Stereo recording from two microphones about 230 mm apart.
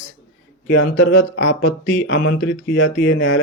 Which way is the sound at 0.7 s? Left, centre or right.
Left.